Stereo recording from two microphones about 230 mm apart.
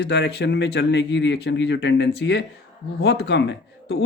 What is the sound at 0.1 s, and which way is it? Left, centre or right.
A man's voice, left.